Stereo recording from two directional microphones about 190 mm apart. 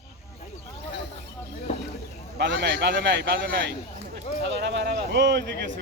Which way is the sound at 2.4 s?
65° right (ahead or behind).